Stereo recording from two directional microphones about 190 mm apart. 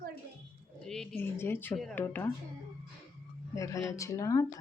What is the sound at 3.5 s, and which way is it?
Speech, 15° left (ahead or behind).